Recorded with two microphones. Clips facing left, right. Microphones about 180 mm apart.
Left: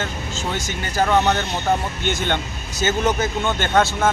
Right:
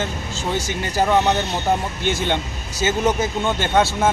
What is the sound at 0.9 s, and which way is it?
Speech, 10° right (ahead or behind).